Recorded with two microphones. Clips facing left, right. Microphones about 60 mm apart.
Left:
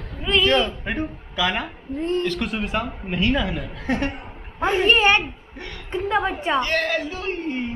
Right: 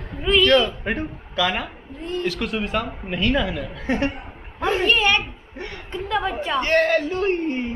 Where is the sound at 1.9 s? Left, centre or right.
Left.